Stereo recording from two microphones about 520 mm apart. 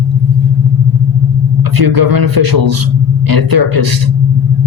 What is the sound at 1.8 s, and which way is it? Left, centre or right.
A man's voice, right.